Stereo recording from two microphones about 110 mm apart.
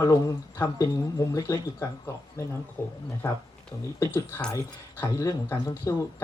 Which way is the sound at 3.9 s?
20° left (ahead or behind).